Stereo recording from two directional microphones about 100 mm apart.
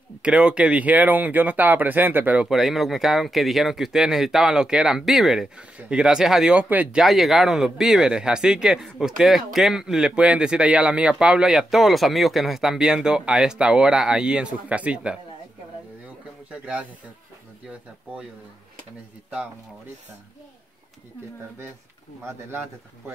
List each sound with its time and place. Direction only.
0.2 s speech: 10° right (ahead or behind)
2.4 s speech: centre (ahead or behind)
7.0 s speech: centre (ahead or behind)
16.4 s speech: 10° right (ahead or behind)